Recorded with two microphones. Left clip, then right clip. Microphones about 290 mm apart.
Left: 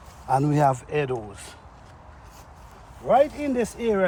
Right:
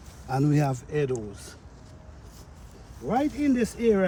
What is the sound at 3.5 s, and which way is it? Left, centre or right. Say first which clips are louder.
Speech: left 1 dB; centre.